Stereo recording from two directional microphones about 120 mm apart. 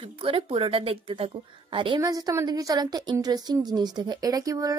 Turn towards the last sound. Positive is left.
turn(degrees=-30)  # may be behind; listen again after turning